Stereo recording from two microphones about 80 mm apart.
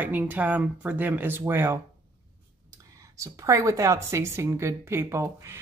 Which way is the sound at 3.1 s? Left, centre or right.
Right.